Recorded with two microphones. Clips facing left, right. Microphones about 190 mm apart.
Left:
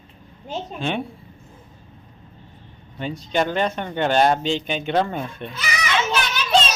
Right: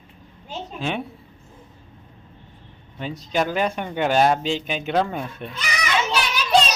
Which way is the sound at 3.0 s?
Centre (ahead or behind).